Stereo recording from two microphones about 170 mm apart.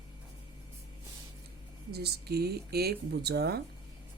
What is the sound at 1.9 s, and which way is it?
Speech, 70° right (ahead or behind).